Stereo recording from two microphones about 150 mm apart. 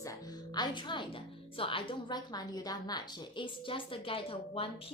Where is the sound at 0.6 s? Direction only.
30° left (ahead or behind).